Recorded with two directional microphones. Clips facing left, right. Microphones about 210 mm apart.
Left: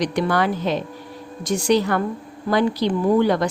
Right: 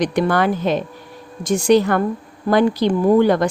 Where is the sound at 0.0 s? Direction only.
50° right (ahead or behind).